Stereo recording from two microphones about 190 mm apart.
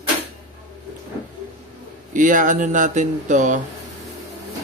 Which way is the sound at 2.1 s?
45° right (ahead or behind).